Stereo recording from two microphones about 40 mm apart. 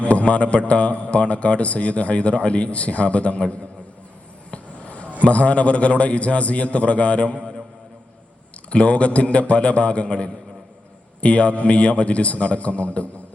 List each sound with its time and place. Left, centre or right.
0.0 s a sound: left
0.7 s a man's voice: left
4.5 s basketball bounce: left
5.2 s a man's voice: left
8.7 s a man's voice: left